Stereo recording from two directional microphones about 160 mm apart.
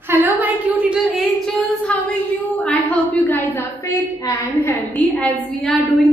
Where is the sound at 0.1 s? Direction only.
10° right (ahead or behind).